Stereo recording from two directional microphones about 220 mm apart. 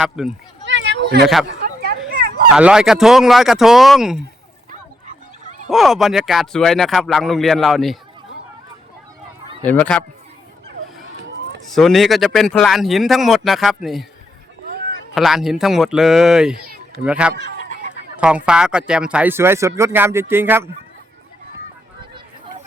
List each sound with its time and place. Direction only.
0.0 s speech: centre (ahead or behind)
0.6 s a sound: 55° right (ahead or behind)
2.5 s speech: 5° right (ahead or behind)
4.7 s fowl: 35° right (ahead or behind)
5.6 s speech: centre (ahead or behind)
9.6 s speech: 5° left (ahead or behind)
11.7 s speech: centre (ahead or behind)
15.1 s speech: centre (ahead or behind)
16.6 s a sound: 40° right (ahead or behind)
17.0 s speech: 5° right (ahead or behind)
17.4 s a sound: 55° left (ahead or behind)
18.2 s speech: 5° right (ahead or behind)